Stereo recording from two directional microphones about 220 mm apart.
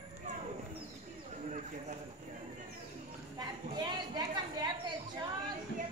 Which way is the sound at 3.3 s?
20° right (ahead or behind).